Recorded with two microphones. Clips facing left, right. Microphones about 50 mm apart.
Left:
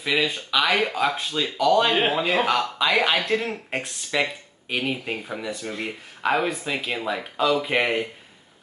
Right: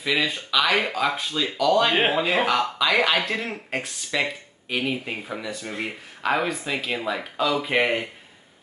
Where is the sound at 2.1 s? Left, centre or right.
Centre.